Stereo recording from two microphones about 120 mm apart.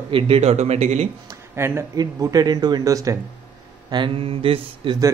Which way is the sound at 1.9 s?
30° right (ahead or behind).